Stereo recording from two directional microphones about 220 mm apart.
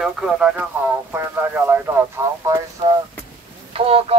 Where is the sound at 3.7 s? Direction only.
25° right (ahead or behind).